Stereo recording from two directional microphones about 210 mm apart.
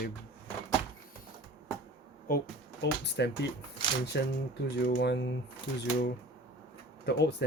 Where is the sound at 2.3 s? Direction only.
50° left (ahead or behind).